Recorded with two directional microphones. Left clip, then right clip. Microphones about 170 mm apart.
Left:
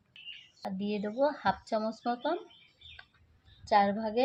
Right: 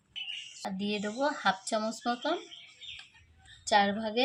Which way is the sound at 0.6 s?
5° left (ahead or behind).